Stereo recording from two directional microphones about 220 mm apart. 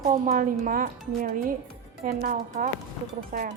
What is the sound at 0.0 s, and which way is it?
A woman's voice, 35° right (ahead or behind).